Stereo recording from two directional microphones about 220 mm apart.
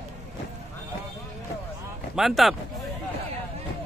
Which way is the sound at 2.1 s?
Centre (ahead or behind).